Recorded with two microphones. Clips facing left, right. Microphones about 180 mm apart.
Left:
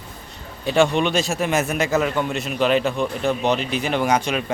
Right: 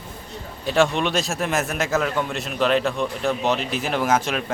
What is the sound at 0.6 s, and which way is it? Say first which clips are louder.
A man's voice: left 2 dB; centre (ahead or behind).